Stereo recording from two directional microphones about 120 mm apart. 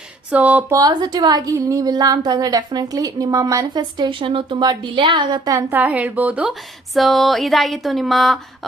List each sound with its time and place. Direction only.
0.3 s speech: 10° right (ahead or behind)
0.7 s a woman's voice: 30° right (ahead or behind)
5.5 s speech: 15° right (ahead or behind); by 8.4 s centre (ahead or behind)